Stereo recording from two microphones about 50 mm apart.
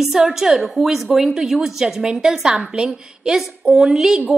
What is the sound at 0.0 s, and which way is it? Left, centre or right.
A woman's voice, centre.